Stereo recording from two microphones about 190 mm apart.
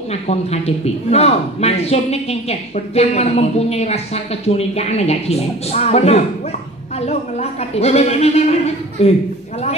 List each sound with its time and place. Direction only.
0.1 s a man's voice: 35° left (ahead or behind)